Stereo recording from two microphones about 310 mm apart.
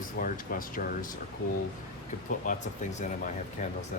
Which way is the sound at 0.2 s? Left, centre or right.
Left.